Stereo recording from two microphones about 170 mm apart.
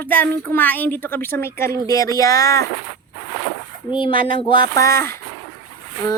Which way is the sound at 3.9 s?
30° left (ahead or behind).